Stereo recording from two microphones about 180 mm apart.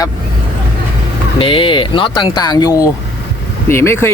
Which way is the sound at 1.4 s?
30° left (ahead or behind).